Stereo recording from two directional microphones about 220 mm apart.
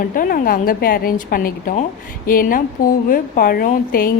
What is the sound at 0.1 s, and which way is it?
A woman's voice, 40° left (ahead or behind).